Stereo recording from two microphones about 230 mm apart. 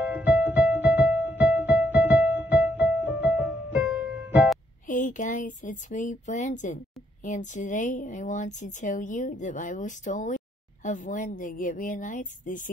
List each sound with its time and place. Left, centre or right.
0.0 s music: centre
4.8 s speech: left